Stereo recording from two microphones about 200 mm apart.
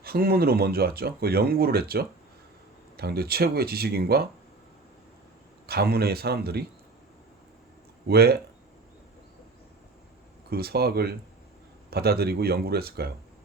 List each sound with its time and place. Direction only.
0.0 s speech: 50° right (ahead or behind)
5.6 s speech: 50° right (ahead or behind)
8.0 s speech: 50° right (ahead or behind)
10.5 s speech: 50° right (ahead or behind)